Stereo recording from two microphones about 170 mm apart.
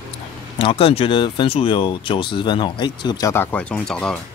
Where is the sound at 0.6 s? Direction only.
35° left (ahead or behind); by 4.2 s 5° left (ahead or behind).